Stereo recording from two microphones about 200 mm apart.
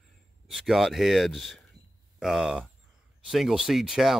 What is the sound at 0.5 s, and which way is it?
Speech, centre (ahead or behind).